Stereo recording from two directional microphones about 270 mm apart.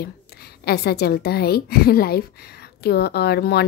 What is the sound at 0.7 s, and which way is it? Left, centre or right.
A woman's voice, left.